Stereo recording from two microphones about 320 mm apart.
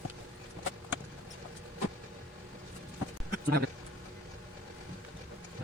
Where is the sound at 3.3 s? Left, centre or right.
Right.